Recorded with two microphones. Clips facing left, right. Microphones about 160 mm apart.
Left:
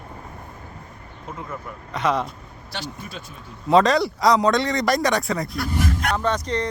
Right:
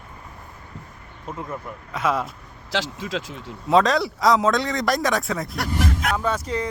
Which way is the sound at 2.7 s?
90° right.